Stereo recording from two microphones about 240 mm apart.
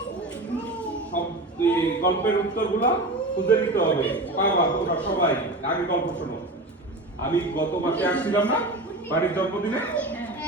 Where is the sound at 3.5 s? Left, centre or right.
Centre.